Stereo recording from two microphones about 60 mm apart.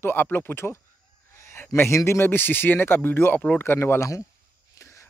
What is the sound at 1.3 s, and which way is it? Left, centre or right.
Fowl, left.